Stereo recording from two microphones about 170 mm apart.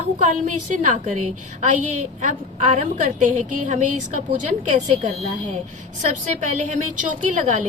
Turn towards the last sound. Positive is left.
turn(degrees=-45)  # may be behind; listen again after turning